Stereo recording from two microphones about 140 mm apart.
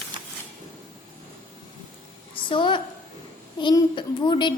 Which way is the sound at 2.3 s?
35° left (ahead or behind).